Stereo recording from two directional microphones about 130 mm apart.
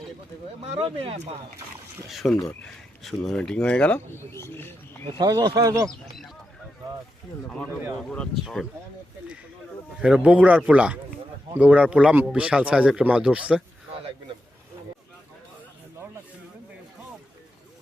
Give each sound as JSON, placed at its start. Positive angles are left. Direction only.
{"t": 0.6, "sound": "speech", "side_deg": -45}
{"t": 2.0, "sound": "speech", "side_deg": 0}
{"t": 5.2, "sound": "speech", "side_deg": -30}
{"t": 5.9, "sound": "speech", "side_deg": 5}
{"t": 8.1, "sound": "speech", "side_deg": 5}
{"t": 10.0, "sound": "speech", "side_deg": -5}